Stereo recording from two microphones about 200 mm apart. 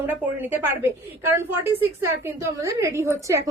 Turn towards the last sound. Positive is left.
turn(degrees=-15)  # may be behind; listen again after turning